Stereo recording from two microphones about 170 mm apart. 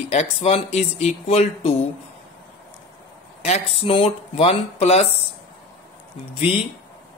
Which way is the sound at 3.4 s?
40° left (ahead or behind).